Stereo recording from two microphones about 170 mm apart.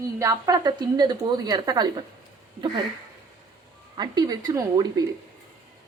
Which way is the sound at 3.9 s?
25° right (ahead or behind).